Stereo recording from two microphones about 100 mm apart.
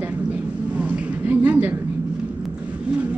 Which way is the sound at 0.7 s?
10° right (ahead or behind).